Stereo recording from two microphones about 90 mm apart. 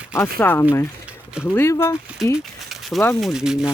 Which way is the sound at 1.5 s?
25° left (ahead or behind).